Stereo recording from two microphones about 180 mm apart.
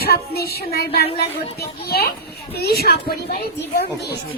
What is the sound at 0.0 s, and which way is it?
A child's voice, 60° left (ahead or behind).